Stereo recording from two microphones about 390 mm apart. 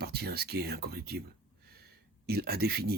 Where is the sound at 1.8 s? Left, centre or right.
Right.